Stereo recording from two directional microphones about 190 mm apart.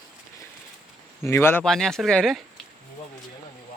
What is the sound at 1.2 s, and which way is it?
Speech, 15° left (ahead or behind).